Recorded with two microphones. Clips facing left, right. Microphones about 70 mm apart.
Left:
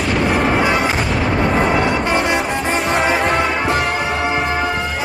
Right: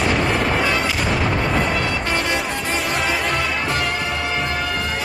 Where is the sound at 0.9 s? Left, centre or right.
Left.